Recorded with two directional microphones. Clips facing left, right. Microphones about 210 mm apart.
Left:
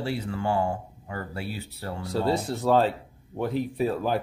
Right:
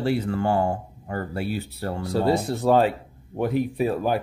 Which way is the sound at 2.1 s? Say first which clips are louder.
Right 3 dB; 15° right (ahead or behind).